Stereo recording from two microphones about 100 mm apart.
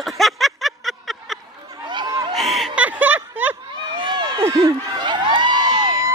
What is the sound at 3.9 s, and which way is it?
Run, 55° right (ahead or behind).